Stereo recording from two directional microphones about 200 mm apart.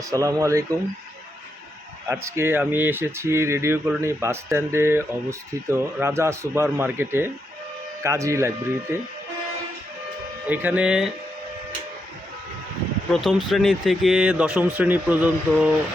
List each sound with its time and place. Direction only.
0.0 s speech: 15° right (ahead or behind)
2.0 s speech: 15° right (ahead or behind)
10.4 s speech: 10° right (ahead or behind)
13.2 s speech: centre (ahead or behind)